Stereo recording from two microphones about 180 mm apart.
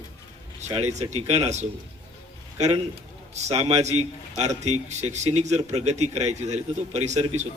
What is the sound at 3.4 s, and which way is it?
A man's voice, 35° right (ahead or behind).